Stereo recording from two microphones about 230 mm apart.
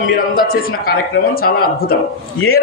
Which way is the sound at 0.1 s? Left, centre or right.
Left.